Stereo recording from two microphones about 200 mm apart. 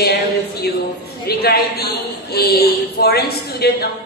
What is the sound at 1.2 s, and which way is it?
A woman's voice, 50° left (ahead or behind).